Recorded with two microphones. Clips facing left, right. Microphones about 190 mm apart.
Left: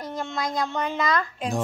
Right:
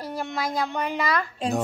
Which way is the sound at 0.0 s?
10° right (ahead or behind).